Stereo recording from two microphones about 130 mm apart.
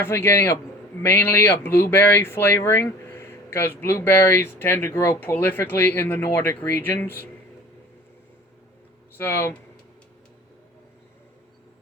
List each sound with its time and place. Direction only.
0.0 s a man's voice: 20° left (ahead or behind)
9.1 s speech: 15° left (ahead or behind)